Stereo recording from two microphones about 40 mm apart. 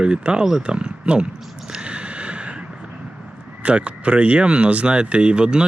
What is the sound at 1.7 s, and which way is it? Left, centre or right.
Snort, right.